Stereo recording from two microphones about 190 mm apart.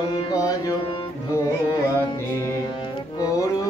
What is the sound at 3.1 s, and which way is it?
Music, 20° left (ahead or behind).